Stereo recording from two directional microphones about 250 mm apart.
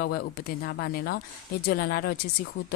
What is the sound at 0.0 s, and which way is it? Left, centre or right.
Speech, left.